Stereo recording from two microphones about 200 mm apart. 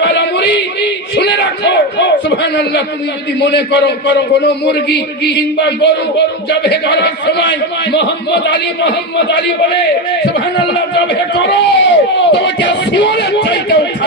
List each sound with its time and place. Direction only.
1.1 s a man's voice: 60° left (ahead or behind)
11.3 s a man's voice: 60° left (ahead or behind)